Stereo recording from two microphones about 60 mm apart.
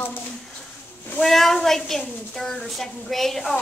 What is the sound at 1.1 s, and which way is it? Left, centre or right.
Speech, centre.